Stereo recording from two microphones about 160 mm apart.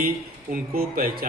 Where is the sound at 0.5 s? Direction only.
65° right (ahead or behind).